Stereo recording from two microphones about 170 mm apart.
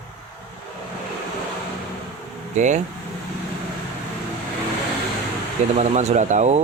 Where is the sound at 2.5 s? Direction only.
45° right (ahead or behind).